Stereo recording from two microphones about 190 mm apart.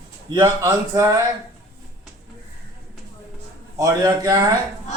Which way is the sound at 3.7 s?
20° right (ahead or behind).